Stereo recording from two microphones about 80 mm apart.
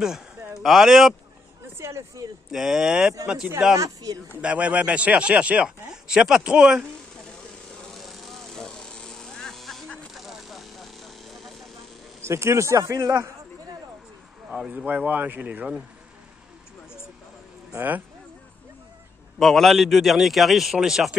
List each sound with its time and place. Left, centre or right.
0.0 s speech: centre
1.8 s a man's voice: right
2.5 s a man's voice: centre
4.4 s speech: centre
7.9 s vehicle: centre
12.2 s a man's voice: right
14.9 s speech: centre
17.7 s speech: right
19.3 s a man's voice: centre